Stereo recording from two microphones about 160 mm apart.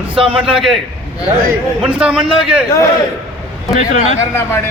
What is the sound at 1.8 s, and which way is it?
Speech, 5° right (ahead or behind).